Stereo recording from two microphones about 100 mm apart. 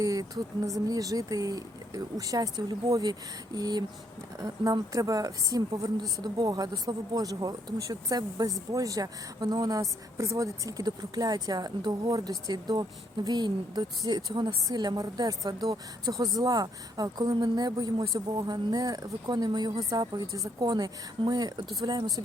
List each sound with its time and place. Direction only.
0.0 s a woman's voice: 35° right (ahead or behind)